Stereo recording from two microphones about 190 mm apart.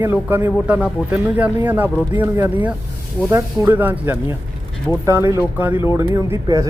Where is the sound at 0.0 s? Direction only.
10° right (ahead or behind).